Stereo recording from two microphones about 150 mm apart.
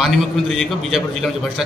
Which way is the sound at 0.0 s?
Centre (ahead or behind).